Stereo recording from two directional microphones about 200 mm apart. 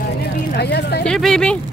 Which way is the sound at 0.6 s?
55° left (ahead or behind).